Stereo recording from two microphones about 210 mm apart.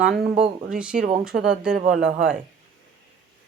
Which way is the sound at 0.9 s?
40° right (ahead or behind).